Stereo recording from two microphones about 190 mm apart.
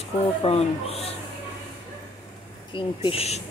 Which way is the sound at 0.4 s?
30° left (ahead or behind).